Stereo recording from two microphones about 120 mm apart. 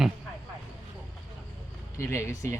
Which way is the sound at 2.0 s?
25° left (ahead or behind).